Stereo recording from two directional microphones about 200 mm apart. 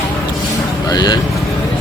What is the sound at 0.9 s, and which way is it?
Speech, 20° left (ahead or behind).